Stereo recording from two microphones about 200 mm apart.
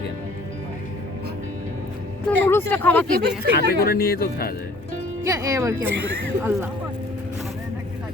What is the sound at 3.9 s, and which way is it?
Speech, 50° left (ahead or behind).